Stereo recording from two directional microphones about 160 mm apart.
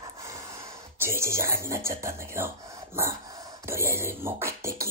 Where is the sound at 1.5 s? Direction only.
15° right (ahead or behind).